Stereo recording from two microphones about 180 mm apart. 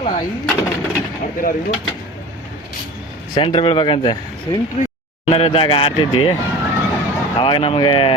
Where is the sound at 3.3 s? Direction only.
25° left (ahead or behind).